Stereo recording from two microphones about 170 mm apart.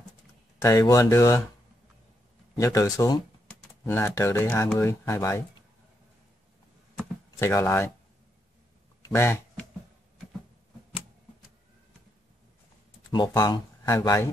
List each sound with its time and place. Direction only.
0.6 s speech: 20° left (ahead or behind)
2.5 s speech: 20° left (ahead or behind)
7.3 s speech: 15° left (ahead or behind)
9.0 s a sound: 15° left (ahead or behind)
13.1 s speech: 25° left (ahead or behind)